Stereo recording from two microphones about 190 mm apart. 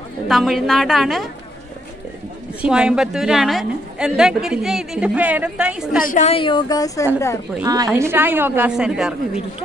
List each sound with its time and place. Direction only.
0.3 s a woman's voice: centre (ahead or behind)
2.6 s a woman's voice: 5° right (ahead or behind)
6.0 s a woman's voice: 35° left (ahead or behind); by 7.1 s 20° left (ahead or behind)
7.6 s a woman's voice: 20° right (ahead or behind); by 9.4 s 5° right (ahead or behind)